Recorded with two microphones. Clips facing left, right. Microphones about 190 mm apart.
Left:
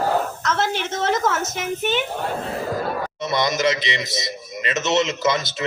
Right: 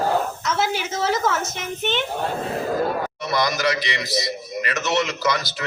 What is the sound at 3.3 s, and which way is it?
A man's voice, 20° left (ahead or behind).